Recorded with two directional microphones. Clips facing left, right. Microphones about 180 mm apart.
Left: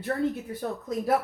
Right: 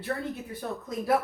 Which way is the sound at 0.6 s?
40° left (ahead or behind).